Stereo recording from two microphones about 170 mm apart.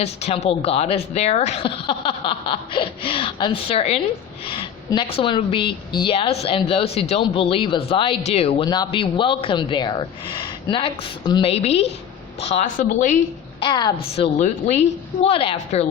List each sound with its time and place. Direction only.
0.0 s a woman's voice: 40° left (ahead or behind)
13.6 s a woman's voice: 25° left (ahead or behind)
14.3 s a woman's voice: 40° left (ahead or behind)